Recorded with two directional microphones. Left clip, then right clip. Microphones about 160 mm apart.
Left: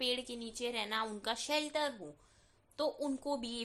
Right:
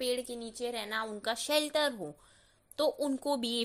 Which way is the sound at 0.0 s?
15° right (ahead or behind).